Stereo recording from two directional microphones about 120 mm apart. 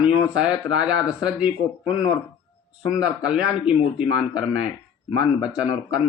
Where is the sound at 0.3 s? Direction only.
10° right (ahead or behind).